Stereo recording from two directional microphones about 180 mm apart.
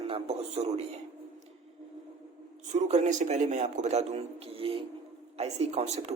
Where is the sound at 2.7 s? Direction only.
40° right (ahead or behind).